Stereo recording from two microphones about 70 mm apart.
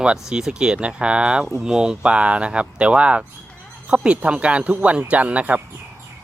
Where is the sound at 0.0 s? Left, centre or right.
Centre.